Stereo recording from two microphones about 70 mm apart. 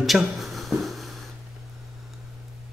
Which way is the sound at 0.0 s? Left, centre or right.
Centre.